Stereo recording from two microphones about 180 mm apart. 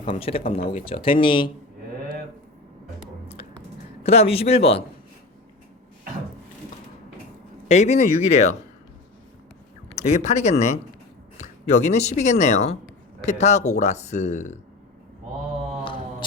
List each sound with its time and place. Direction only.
0.2 s speech: 30° left (ahead or behind)
4.0 s speech: 35° left (ahead or behind)
7.7 s speech: 40° left (ahead or behind)
10.1 s speech: 40° left (ahead or behind)